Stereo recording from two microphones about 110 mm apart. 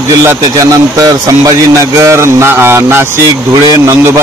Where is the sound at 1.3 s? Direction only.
30° right (ahead or behind).